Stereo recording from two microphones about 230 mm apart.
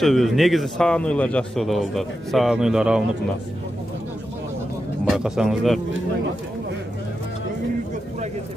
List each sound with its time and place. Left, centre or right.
0.0 s a man's voice: centre
5.1 s a man's voice: centre